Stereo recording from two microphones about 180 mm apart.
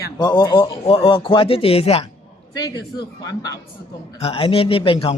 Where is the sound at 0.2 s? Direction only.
25° left (ahead or behind).